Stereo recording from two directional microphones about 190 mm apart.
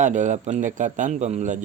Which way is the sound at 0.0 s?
40° right (ahead or behind).